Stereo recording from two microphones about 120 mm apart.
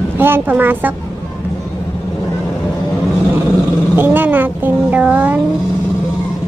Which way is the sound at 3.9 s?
15° right (ahead or behind).